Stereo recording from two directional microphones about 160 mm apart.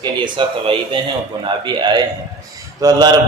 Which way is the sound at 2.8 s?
25° right (ahead or behind).